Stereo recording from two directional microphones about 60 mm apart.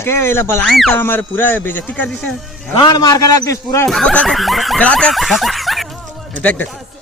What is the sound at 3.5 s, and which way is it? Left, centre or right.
Speech, left.